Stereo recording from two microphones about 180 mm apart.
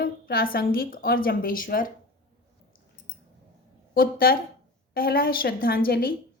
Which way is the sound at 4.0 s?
55° left (ahead or behind).